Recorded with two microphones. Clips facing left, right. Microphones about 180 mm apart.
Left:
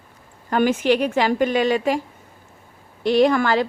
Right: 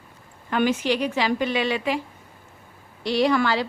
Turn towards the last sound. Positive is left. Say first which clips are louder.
# left 4 dB
turn(degrees=50)  # may be behind; listen again after turning